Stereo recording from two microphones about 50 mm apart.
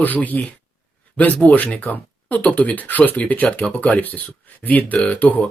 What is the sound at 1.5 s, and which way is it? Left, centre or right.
Speech, left.